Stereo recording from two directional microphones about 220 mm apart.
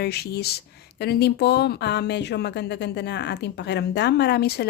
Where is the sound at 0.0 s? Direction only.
45° left (ahead or behind).